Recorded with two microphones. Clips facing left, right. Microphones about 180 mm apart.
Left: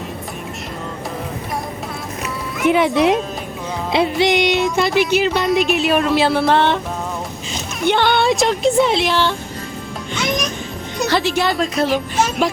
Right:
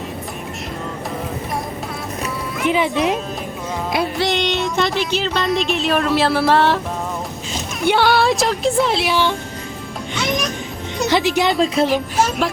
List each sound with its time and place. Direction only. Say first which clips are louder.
2.7 s speech: left 4 dB; 70° left (ahead or behind)
4.2 s music: left 5 dB; 15° left (ahead or behind)
4.6 s speech: left 2 dB; centre (ahead or behind)
5.1 s music: left 5 dB; 10° left (ahead or behind)
5.5 s speech: left 3 dB; 5° left (ahead or behind)
7.8 s speech: right 1 dB; 5° right (ahead or behind)
11.1 s speech: right 1 dB; 15° right (ahead or behind)
11.6 s speech: right 2 dB; 30° right (ahead or behind)
11.9 s speech: even; centre (ahead or behind)